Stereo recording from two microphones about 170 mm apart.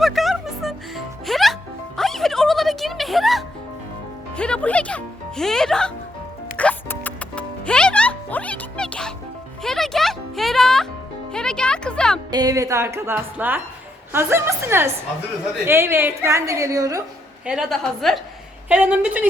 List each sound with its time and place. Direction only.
0.0 s music: centre (ahead or behind)
12.3 s music: 20° right (ahead or behind)
14.1 s a woman's voice: 15° right (ahead or behind)
17.4 s a woman's voice: 5° right (ahead or behind)
18.7 s a sound: 5° right (ahead or behind)